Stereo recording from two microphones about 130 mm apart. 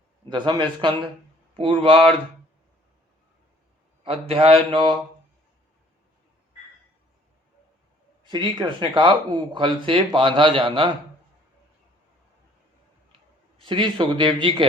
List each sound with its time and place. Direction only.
0.3 s speech: 35° right (ahead or behind)
4.0 s speech: 45° right (ahead or behind)
8.3 s speech: 35° right (ahead or behind)
13.6 s speech: 40° right (ahead or behind)